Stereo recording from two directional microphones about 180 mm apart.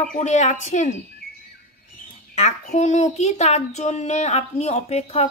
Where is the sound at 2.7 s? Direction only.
40° left (ahead or behind).